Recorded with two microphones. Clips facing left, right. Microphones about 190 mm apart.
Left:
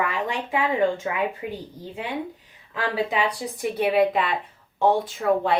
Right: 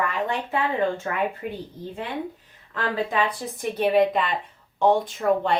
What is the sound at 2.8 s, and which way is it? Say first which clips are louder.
A woman's voice: even; 10° left (ahead or behind).